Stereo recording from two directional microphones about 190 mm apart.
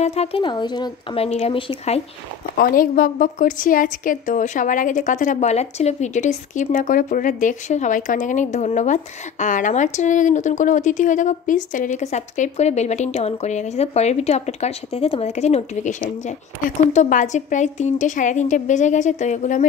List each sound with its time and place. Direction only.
0.0 s a woman's voice: 35° left (ahead or behind)
2.5 s a woman's voice: 50° left (ahead or behind)